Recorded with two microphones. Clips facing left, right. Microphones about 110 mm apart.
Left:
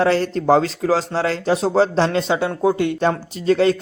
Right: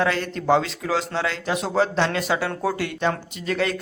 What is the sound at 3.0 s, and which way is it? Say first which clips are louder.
Speech: left 5 dB; 35° left (ahead or behind).